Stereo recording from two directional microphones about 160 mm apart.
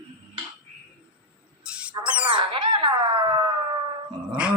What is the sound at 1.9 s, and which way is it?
Music, 30° right (ahead or behind).